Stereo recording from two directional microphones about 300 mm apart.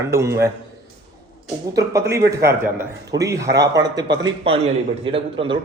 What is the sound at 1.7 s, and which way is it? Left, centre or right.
A man's voice, centre.